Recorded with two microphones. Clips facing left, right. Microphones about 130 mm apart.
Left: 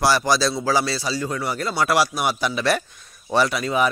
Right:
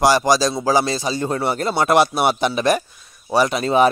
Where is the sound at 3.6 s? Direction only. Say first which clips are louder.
Right 6 dB; 30° right (ahead or behind).